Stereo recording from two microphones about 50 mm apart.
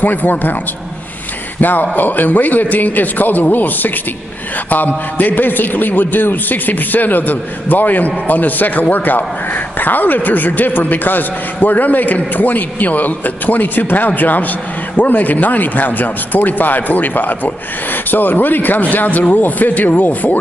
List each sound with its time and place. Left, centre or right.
0.0 s a man's voice: left
1.6 s a man's voice: left